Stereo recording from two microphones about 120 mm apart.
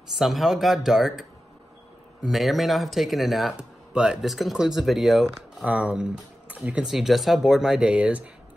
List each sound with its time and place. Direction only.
0.1 s speech: centre (ahead or behind)
2.2 s speech: centre (ahead or behind)
5.7 s speech: 10° right (ahead or behind)